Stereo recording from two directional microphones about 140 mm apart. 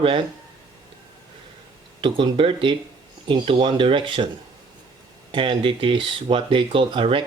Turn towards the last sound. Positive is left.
turn(degrees=-35)  # may be behind; listen again after turning